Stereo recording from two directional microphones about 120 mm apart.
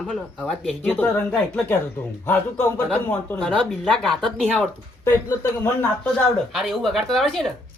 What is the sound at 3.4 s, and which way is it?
Speech, centre (ahead or behind).